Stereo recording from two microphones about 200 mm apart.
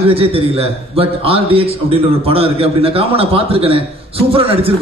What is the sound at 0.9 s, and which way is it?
A man's voice, 30° right (ahead or behind).